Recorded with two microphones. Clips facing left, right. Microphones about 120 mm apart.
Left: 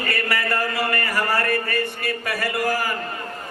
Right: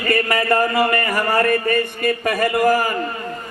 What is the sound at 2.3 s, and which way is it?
Speech, 20° right (ahead or behind).